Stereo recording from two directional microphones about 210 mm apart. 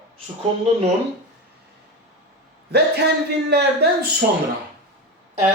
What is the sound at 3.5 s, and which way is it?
Speech, 50° right (ahead or behind).